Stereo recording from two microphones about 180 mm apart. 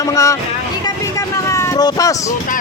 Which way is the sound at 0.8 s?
15° left (ahead or behind).